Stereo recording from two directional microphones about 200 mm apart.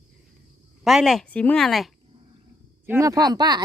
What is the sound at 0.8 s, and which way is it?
Speech, centre (ahead or behind).